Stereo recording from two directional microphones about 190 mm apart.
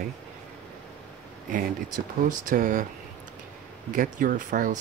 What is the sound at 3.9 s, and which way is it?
Speech, 45° right (ahead or behind).